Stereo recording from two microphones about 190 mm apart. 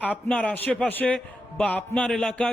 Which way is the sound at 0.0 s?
10° left (ahead or behind).